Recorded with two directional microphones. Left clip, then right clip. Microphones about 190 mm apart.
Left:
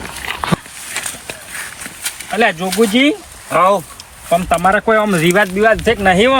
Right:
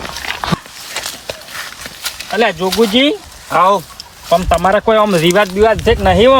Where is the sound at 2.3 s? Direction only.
50° right (ahead or behind).